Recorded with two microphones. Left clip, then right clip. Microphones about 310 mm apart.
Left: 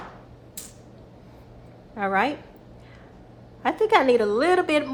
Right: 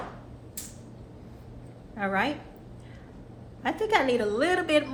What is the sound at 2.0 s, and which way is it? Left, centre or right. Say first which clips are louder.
Speech: left 5 dB; left.